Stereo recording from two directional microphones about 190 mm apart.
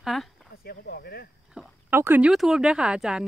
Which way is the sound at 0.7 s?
55° left (ahead or behind).